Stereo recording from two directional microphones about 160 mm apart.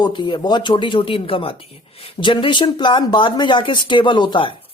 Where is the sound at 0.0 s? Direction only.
30° left (ahead or behind).